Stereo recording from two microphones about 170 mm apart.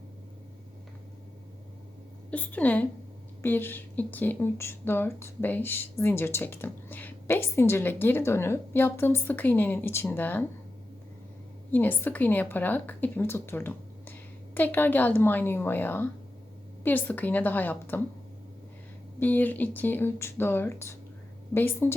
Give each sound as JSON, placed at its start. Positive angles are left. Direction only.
{"t": 2.3, "sound": "speech", "side_deg": 10}
{"t": 11.7, "sound": "speech", "side_deg": 10}
{"t": 19.2, "sound": "speech", "side_deg": 10}